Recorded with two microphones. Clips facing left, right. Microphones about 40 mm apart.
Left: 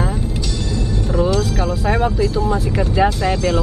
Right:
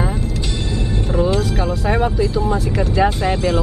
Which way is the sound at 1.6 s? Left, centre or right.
Centre.